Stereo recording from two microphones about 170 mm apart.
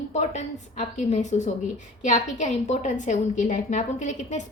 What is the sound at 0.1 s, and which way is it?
A woman's voice, 45° left (ahead or behind).